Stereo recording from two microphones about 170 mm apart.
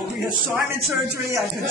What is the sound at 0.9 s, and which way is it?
Speech, 15° right (ahead or behind).